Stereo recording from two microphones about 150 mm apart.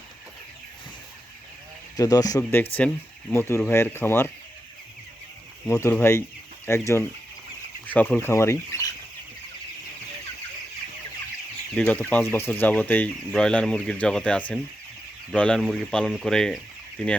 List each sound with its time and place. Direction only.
2.0 s speech: 25° left (ahead or behind)
2.4 s speech: 15° left (ahead or behind)
5.6 s speech: 15° left (ahead or behind)
11.7 s speech: 10° left (ahead or behind)